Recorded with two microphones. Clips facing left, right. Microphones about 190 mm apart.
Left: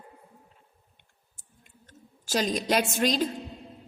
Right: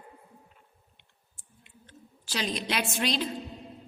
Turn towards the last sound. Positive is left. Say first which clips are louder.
# left 5 dB
turn(degrees=45)  # may be behind; listen again after turning